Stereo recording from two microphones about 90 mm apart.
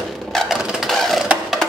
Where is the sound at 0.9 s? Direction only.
Centre (ahead or behind).